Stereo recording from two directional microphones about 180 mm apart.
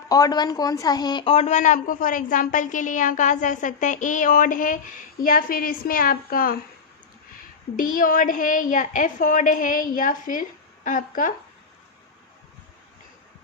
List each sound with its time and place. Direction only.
0.1 s a woman's voice: 20° left (ahead or behind); by 6.6 s 55° left (ahead or behind)
7.8 s a woman's voice: 50° left (ahead or behind)